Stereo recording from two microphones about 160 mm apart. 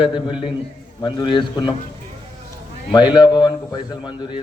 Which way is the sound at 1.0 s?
25° left (ahead or behind).